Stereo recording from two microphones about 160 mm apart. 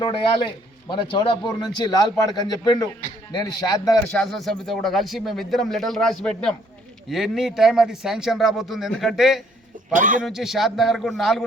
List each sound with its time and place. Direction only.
0.0 s a man's voice: 30° left (ahead or behind)
4.1 s speech: centre (ahead or behind)
9.9 s a man's voice: 55° right (ahead or behind)
10.2 s speech: centre (ahead or behind)